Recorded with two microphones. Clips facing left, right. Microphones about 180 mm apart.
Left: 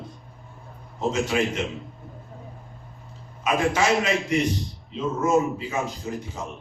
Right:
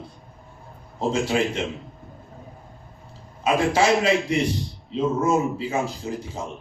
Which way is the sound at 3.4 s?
30° right (ahead or behind).